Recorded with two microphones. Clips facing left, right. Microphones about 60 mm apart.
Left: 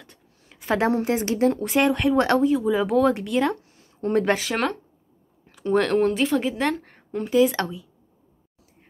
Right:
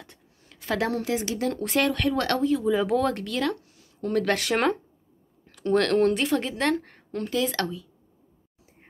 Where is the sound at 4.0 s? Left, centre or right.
Left.